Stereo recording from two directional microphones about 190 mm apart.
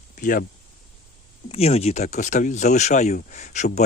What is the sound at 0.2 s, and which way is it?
Speech, 45° left (ahead or behind).